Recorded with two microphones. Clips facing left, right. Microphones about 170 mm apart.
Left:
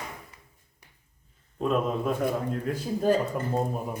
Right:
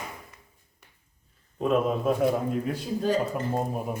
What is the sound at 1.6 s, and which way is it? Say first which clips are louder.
Speech: right 2 dB; 5° right (ahead or behind).